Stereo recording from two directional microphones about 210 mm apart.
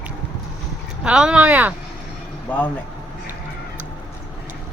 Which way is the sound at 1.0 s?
5° right (ahead or behind).